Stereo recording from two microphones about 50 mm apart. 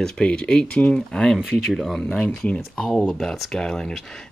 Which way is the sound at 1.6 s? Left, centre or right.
Centre.